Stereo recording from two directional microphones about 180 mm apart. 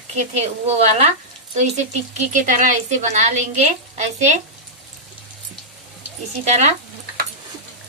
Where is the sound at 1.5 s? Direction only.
40° right (ahead or behind).